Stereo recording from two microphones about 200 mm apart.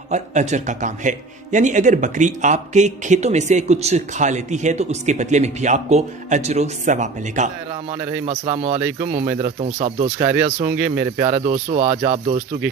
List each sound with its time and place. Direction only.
0.1 s a man's voice: 35° right (ahead or behind)
10.2 s speech: 10° right (ahead or behind)
11.2 s a man's voice: 35° right (ahead or behind)